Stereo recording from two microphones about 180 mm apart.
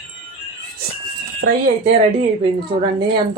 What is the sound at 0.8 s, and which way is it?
Music, 60° right (ahead or behind).